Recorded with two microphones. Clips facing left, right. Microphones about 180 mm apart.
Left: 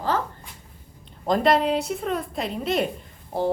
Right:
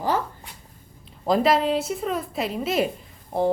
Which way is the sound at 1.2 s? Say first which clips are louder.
Even; centre (ahead or behind).